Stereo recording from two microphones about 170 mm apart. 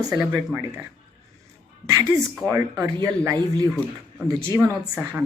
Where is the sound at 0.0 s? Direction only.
20° right (ahead or behind).